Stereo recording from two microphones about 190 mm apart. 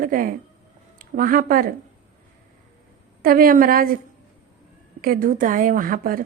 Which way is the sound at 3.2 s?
50° right (ahead or behind).